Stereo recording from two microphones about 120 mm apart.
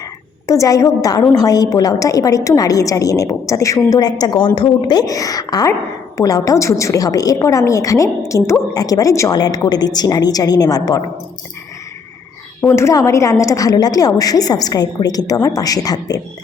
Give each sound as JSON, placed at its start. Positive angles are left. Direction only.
{"t": 0.4, "sound": "a woman's voice", "side_deg": 25}
{"t": 12.6, "sound": "a woman's voice", "side_deg": 25}